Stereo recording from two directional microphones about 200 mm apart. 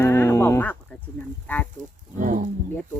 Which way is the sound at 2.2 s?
40° right (ahead or behind).